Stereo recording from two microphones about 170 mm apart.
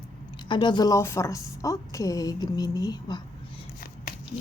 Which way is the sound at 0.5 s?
25° left (ahead or behind).